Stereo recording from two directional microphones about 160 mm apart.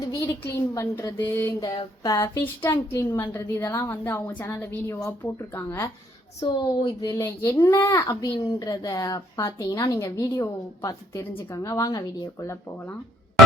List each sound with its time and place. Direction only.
0.2 s a woman's voice: 15° left (ahead or behind)
1.6 s a child's voice: 30° left (ahead or behind)
2.2 s a woman's voice: 15° left (ahead or behind)
6.4 s a child's voice: 30° left (ahead or behind)
7.1 s a child's voice: 15° left (ahead or behind)